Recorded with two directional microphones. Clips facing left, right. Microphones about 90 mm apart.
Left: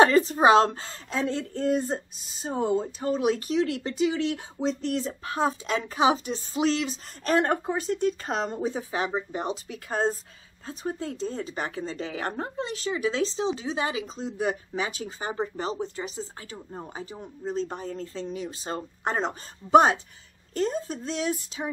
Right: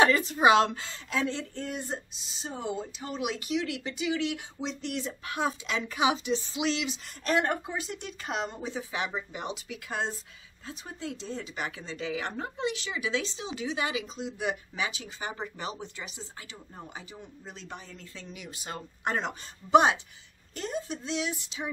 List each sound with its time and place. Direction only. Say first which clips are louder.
0.0 s a woman's voice: left 4 dB; 35° left (ahead or behind)